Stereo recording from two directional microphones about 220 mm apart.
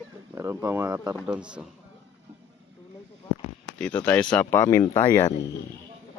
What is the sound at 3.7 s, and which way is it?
Speech, 5° left (ahead or behind).